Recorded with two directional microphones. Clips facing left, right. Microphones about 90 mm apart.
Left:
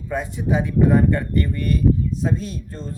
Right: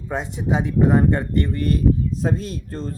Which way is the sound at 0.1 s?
25° right (ahead or behind).